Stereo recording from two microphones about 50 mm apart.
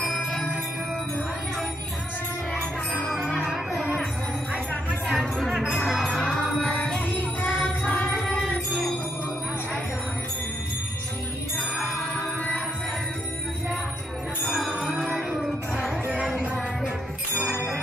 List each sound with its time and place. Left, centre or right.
5.1 s music: centre
7.1 s music: left
8.4 s music: centre
14.4 s music: centre
16.1 s music: centre